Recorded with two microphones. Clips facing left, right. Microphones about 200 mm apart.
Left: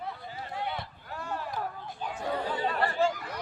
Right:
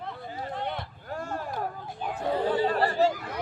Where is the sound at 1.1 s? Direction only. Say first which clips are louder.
Right 4 dB; 45° right (ahead or behind).